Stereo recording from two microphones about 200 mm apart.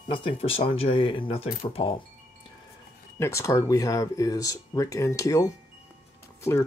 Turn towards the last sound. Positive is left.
turn(degrees=15)  # may be behind; listen again after turning